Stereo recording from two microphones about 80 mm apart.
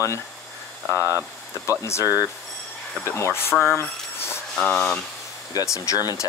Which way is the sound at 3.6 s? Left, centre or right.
Left.